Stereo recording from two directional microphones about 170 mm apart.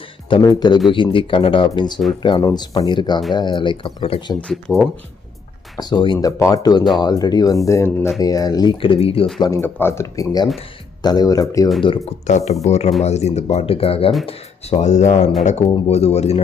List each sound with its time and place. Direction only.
0.3 s speech: 25° left (ahead or behind)
4.4 s speech: 5° left (ahead or behind)
5.8 s speech: 25° left (ahead or behind)
9.4 s speech: 15° left (ahead or behind)
12.3 s speech: 40° left (ahead or behind)